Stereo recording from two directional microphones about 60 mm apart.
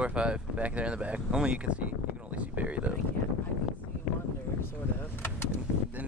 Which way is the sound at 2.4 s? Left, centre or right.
Right.